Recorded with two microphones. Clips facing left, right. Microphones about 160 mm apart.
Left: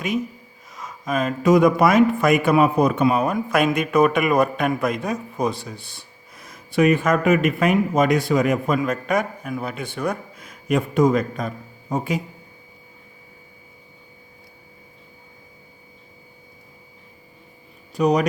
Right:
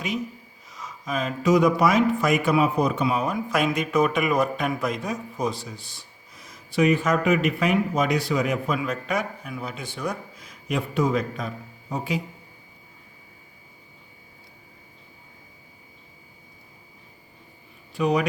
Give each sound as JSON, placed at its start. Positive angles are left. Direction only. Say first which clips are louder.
{"t": 0.7, "sound": "speech", "louder": "left 5 dB", "side_deg": 50}
{"t": 17.9, "sound": "speech", "louder": "left 4 dB", "side_deg": 40}